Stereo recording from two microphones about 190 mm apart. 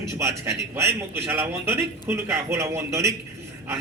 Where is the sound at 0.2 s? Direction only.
15° right (ahead or behind).